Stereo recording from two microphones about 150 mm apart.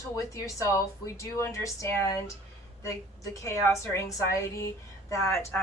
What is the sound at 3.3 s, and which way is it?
Speech, 20° left (ahead or behind).